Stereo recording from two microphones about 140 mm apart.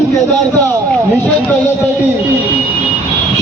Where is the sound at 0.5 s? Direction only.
15° left (ahead or behind).